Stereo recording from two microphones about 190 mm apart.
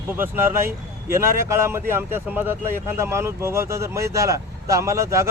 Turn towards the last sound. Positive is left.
turn(degrees=-15)  # may be behind; listen again after turning